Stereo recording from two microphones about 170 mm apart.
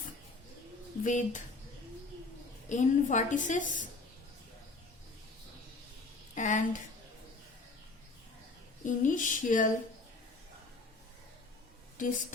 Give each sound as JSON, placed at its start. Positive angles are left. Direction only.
{"t": 1.0, "sound": "a woman's voice", "side_deg": 45}
{"t": 2.6, "sound": "a woman's voice", "side_deg": 45}
{"t": 6.3, "sound": "a sound", "side_deg": 45}
{"t": 8.8, "sound": "a woman's voice", "side_deg": 50}
{"t": 12.0, "sound": "a woman's voice", "side_deg": 50}